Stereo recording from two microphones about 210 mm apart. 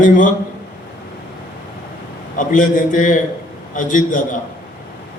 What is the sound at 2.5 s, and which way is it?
A man's voice, 40° left (ahead or behind).